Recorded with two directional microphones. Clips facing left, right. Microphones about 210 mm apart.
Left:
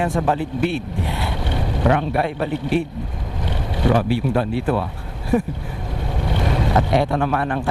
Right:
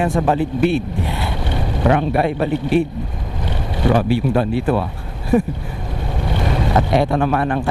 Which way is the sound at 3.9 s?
15° right (ahead or behind).